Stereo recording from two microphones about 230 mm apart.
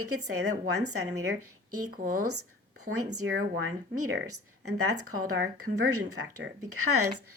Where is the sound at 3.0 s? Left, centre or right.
Right.